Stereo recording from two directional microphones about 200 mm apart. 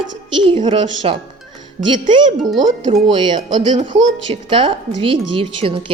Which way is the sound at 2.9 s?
25° right (ahead or behind).